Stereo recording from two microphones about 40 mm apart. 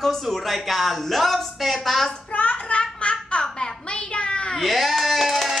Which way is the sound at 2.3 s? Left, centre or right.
Left.